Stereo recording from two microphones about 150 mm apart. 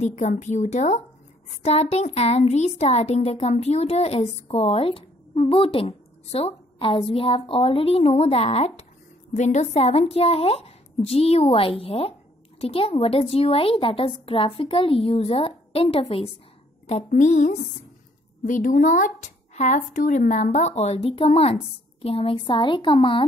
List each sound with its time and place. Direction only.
0.0 s a woman's voice: 50° left (ahead or behind)
17.1 s a woman's voice: 55° left (ahead or behind); by 23.2 s 35° left (ahead or behind)